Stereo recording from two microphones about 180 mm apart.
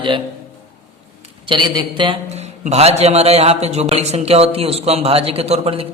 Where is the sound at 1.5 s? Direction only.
25° right (ahead or behind).